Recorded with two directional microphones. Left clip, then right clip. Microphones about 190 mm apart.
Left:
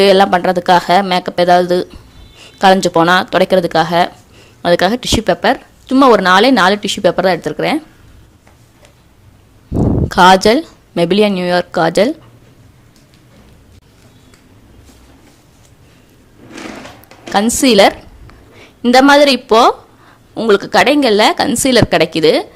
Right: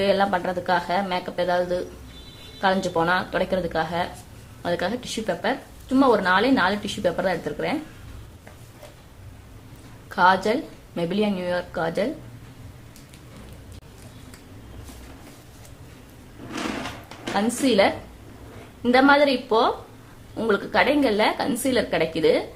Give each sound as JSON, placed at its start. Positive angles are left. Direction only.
{"t": 0.0, "sound": "speech", "side_deg": 50}
{"t": 10.1, "sound": "speech", "side_deg": 50}
{"t": 17.3, "sound": "speech", "side_deg": 50}